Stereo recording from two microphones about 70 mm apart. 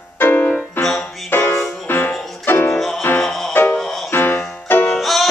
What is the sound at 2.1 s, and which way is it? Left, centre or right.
Music, centre.